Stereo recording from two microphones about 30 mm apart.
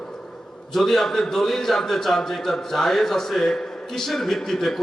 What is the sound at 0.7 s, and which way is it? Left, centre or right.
A man's voice, centre.